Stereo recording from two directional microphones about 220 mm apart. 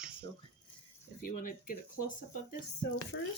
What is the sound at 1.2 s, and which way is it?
Speech, 40° left (ahead or behind).